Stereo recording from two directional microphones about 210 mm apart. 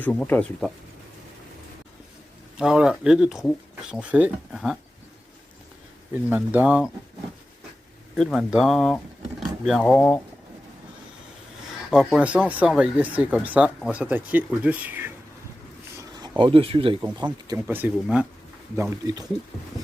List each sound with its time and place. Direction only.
0.0 s speech: 5° left (ahead or behind)
2.6 s speech: 5° right (ahead or behind)
6.2 s speech: 10° right (ahead or behind)
8.1 s speech: centre (ahead or behind)
11.9 s speech: 5° right (ahead or behind)
16.0 s a sound: 20° right (ahead or behind)
17.5 s speech: 10° right (ahead or behind)